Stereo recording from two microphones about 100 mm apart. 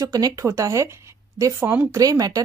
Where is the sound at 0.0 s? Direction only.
35° right (ahead or behind).